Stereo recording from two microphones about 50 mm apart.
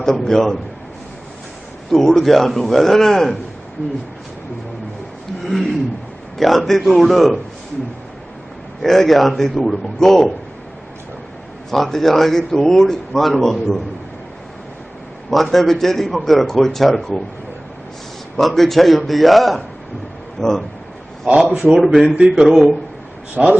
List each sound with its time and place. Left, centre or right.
0.0 s a man's voice: centre
1.9 s a man's voice: centre
5.4 s a man's voice: centre
8.8 s a man's voice: centre
11.7 s a man's voice: centre
15.3 s a man's voice: centre
18.3 s a man's voice: centre
21.5 s speech: centre
22.3 s a man's voice: centre